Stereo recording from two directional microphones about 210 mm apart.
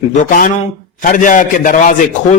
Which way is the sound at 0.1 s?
40° left (ahead or behind).